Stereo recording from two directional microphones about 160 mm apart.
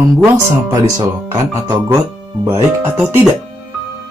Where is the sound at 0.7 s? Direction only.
20° right (ahead or behind).